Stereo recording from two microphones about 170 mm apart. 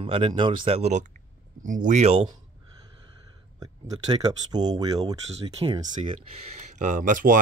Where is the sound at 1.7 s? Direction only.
50° right (ahead or behind).